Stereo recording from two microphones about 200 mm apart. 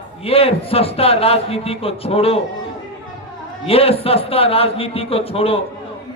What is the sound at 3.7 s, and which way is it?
A man's voice, 30° left (ahead or behind).